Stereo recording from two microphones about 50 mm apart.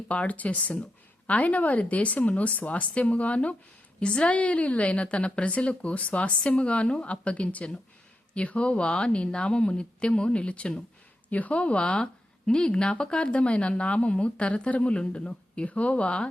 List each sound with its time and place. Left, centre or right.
0.1 s speech: left